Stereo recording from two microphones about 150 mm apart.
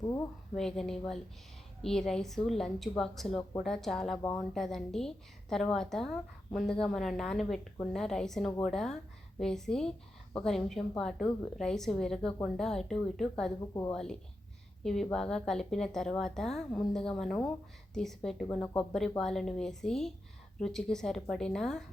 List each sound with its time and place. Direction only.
0.5 s a woman's voice: 5° left (ahead or behind)
4.2 s speech: 20° left (ahead or behind)
4.5 s a woman's voice: centre (ahead or behind)